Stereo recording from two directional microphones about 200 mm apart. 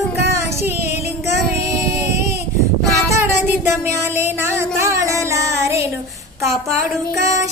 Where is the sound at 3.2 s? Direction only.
10° right (ahead or behind).